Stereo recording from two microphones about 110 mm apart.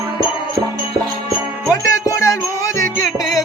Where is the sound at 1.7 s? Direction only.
30° left (ahead or behind).